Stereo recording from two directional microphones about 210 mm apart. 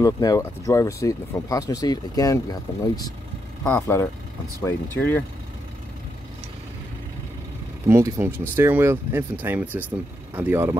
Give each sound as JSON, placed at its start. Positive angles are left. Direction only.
{"t": 0.0, "sound": "speech", "side_deg": 15}
{"t": 7.9, "sound": "speech", "side_deg": -10}